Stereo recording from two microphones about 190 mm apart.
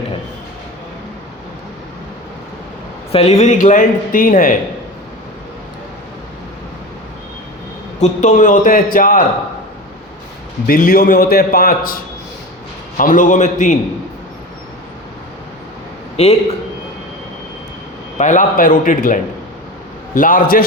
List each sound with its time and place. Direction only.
3.1 s speech: 30° left (ahead or behind)
7.9 s a man's voice: 40° left (ahead or behind)
10.7 s a man's voice: 50° left (ahead or behind)
13.0 s speech: 45° left (ahead or behind)
16.2 s speech: 35° left (ahead or behind)
18.2 s a man's voice: 40° left (ahead or behind)